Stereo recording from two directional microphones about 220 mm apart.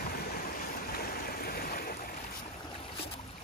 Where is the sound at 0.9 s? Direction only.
45° left (ahead or behind).